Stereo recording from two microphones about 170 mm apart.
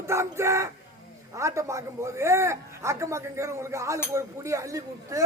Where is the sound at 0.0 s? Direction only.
15° right (ahead or behind).